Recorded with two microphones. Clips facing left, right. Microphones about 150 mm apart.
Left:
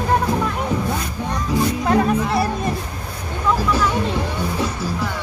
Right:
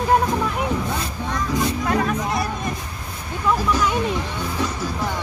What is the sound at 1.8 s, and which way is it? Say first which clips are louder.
Music: left 4 dB; 30° left (ahead or behind).